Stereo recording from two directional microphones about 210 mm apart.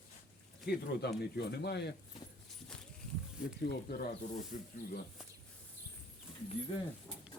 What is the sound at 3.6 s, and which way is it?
Speech, 45° left (ahead or behind).